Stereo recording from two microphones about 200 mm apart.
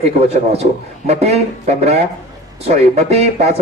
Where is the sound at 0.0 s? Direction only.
30° right (ahead or behind).